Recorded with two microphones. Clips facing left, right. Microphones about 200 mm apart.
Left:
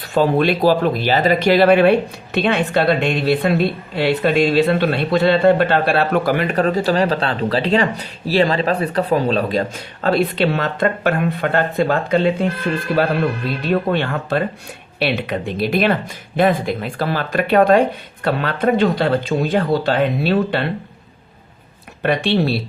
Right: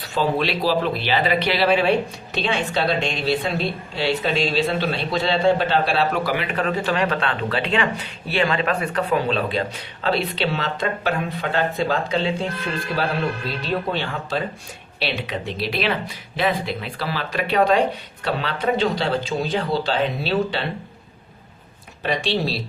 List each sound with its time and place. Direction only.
0.1 s speech: 50° left (ahead or behind)
13.6 s speech: 60° left (ahead or behind)
22.0 s speech: 60° left (ahead or behind)